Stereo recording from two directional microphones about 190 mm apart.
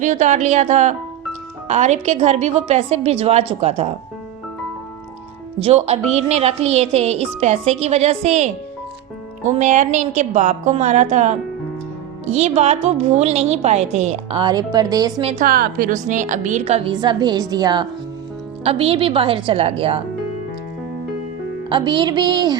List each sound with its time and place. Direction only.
0.0 s a woman's voice: 40° right (ahead or behind)
5.5 s a woman's voice: 30° right (ahead or behind)
15.3 s a woman's voice: 45° right (ahead or behind)
21.7 s a woman's voice: 25° right (ahead or behind)